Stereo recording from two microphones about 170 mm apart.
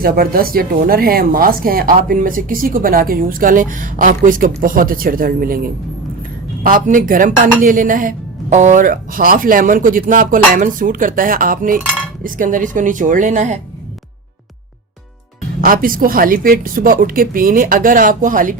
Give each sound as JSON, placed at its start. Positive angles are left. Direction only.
{"t": 0.0, "sound": "a woman's voice", "side_deg": -60}
{"t": 15.6, "sound": "speech", "side_deg": -55}